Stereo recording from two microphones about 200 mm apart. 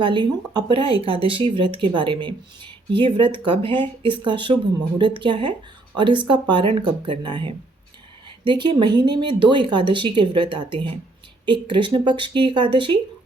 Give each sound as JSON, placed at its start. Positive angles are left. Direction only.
{"t": 0.0, "sound": "speech", "side_deg": -25}